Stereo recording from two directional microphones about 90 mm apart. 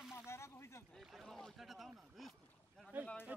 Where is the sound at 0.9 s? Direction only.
Centre (ahead or behind).